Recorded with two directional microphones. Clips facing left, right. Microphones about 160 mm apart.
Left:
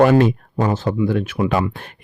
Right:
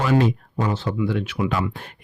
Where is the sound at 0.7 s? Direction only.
45° left (ahead or behind); by 1.9 s 65° left (ahead or behind).